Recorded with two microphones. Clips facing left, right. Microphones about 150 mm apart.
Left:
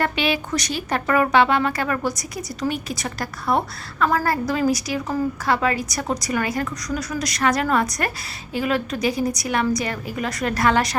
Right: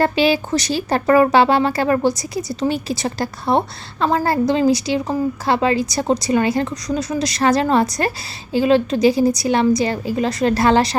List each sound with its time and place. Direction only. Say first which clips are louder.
0.0 s a woman's voice: right 6 dB; 30° right (ahead or behind)